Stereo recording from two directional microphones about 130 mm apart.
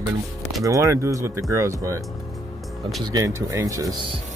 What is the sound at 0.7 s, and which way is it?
Speech, 25° right (ahead or behind).